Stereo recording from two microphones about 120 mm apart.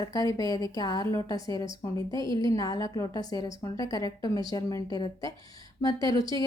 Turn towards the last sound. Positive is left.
turn(degrees=30)  # may be behind; listen again after turning